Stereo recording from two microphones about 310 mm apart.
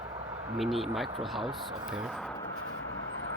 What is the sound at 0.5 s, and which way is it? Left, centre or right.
Speech, centre.